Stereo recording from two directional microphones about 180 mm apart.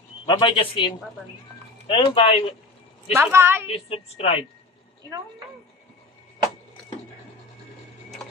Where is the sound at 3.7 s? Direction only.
30° left (ahead or behind).